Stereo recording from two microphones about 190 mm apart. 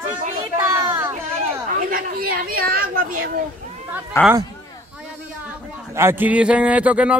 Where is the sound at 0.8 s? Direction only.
15° right (ahead or behind).